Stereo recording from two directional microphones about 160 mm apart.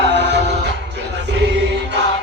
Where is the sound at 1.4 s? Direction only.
90° right.